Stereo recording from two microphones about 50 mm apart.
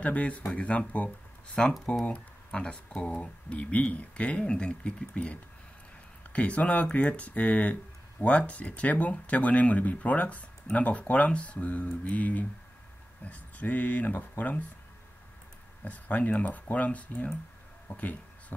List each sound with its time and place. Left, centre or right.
0.0 s speech: left
15.8 s speech: left